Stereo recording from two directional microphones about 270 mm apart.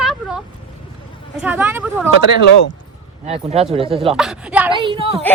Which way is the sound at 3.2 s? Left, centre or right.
Right.